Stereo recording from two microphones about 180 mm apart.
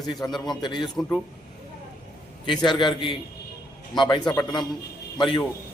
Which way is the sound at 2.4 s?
25° left (ahead or behind).